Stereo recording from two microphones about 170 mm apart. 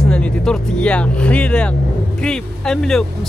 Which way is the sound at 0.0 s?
5° left (ahead or behind).